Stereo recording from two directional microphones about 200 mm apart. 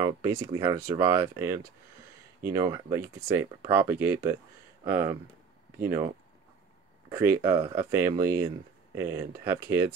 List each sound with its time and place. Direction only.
0.0 s speech: 15° right (ahead or behind)
7.1 s speech: 10° right (ahead or behind)